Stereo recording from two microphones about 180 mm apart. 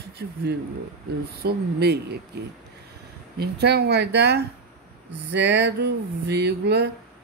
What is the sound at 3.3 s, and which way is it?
Speech, 65° right (ahead or behind).